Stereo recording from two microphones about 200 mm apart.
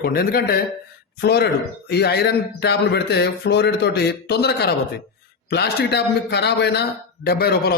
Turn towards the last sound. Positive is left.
turn(degrees=50)  # may be behind; listen again after turning